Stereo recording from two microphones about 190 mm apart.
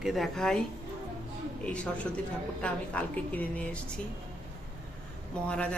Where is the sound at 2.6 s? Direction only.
5° left (ahead or behind).